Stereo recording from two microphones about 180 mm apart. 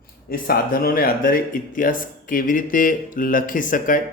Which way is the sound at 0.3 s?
55° left (ahead or behind).